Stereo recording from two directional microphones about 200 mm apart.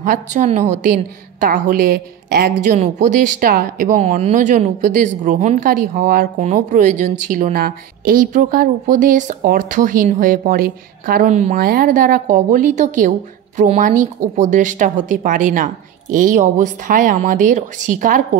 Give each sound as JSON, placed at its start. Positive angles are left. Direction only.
{"t": 0.0, "sound": "a woman's voice", "side_deg": -40}